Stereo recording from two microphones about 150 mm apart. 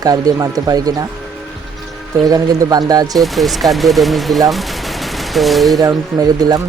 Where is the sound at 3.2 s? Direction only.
Centre (ahead or behind).